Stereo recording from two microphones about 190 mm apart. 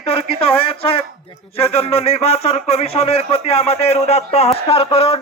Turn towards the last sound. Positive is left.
turn(degrees=30)  # may be behind; listen again after turning